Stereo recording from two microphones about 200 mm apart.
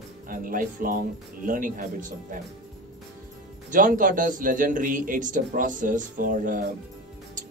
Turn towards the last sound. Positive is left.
turn(degrees=-40)  # may be behind; listen again after turning